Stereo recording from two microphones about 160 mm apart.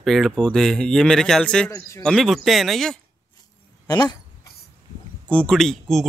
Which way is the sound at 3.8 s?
25° left (ahead or behind).